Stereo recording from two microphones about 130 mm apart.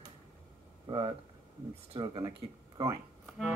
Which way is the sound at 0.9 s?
40° right (ahead or behind).